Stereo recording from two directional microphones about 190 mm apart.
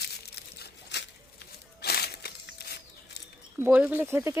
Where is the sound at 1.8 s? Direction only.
55° left (ahead or behind).